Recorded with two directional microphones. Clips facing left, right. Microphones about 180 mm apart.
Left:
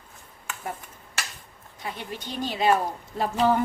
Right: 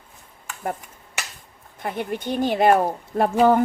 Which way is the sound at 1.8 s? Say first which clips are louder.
Right 8 dB; 55° right (ahead or behind).